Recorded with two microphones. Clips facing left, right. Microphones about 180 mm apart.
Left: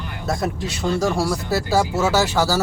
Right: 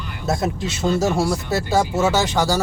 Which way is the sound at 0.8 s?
25° right (ahead or behind).